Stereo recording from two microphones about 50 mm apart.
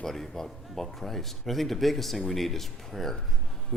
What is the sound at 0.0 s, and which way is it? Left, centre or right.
A man's voice, centre.